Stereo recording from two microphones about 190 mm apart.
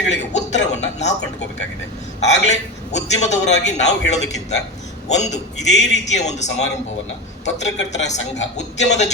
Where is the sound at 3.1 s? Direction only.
35° left (ahead or behind).